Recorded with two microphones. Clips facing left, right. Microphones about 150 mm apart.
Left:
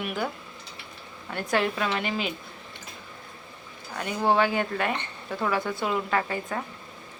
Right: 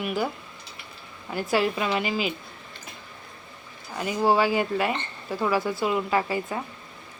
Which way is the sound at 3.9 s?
5° right (ahead or behind).